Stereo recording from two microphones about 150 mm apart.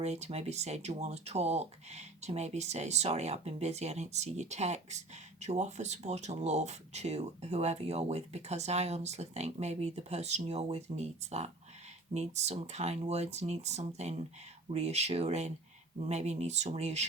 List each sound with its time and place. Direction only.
0.0 s speech: 45° right (ahead or behind)